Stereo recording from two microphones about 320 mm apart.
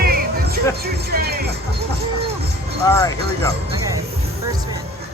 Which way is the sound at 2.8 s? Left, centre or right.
Centre.